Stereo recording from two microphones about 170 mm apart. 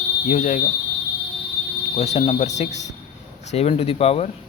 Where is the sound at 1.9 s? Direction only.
40° left (ahead or behind).